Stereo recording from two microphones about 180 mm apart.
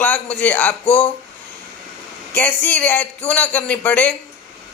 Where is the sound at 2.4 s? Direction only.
10° left (ahead or behind).